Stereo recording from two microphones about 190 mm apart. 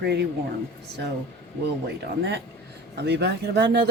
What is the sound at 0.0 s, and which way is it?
Speech, 60° right (ahead or behind).